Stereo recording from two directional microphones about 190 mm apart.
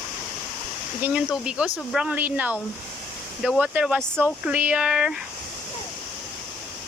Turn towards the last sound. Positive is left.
turn(degrees=-5)  # may be behind; listen again after turning